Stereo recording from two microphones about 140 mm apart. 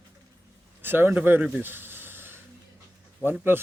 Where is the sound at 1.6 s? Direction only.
15° right (ahead or behind).